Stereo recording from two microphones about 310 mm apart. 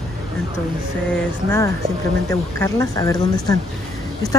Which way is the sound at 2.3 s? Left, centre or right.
Centre.